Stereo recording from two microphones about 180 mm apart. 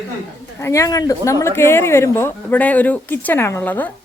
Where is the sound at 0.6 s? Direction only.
15° left (ahead or behind).